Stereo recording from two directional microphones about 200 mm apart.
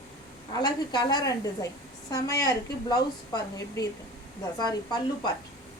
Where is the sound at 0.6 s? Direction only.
20° left (ahead or behind).